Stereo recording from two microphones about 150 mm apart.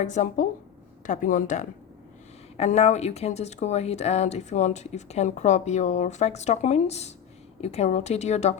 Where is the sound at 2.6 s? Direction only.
45° left (ahead or behind).